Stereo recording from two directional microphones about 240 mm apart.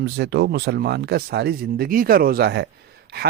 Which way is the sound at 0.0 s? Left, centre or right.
Right.